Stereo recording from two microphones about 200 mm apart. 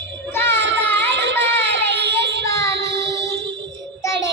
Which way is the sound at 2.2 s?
60° right (ahead or behind).